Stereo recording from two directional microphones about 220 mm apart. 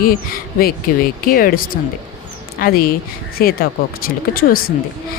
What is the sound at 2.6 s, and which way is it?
A woman's voice, 40° left (ahead or behind).